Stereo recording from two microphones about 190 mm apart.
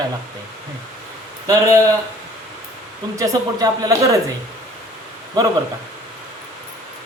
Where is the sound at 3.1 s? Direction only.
20° right (ahead or behind).